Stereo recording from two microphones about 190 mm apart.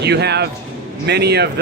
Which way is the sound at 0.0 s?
60° right (ahead or behind).